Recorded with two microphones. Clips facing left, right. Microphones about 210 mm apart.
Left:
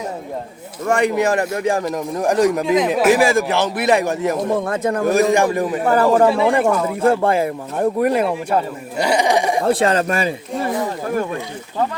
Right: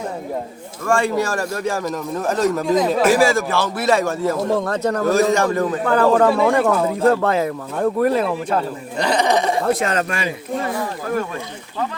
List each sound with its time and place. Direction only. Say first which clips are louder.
0.9 s speech: left 2 dB; 20° left (ahead or behind)
9.7 s speech: left 4 dB; 35° left (ahead or behind)